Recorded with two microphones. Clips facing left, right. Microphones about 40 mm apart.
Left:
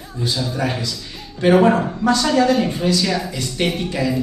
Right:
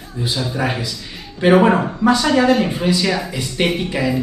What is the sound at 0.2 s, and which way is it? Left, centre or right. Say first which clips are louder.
Speech: right 1 dB; centre.